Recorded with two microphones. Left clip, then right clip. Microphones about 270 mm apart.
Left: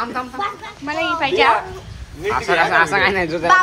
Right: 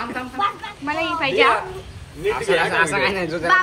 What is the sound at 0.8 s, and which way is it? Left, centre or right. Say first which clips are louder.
Speech: left 2 dB; centre.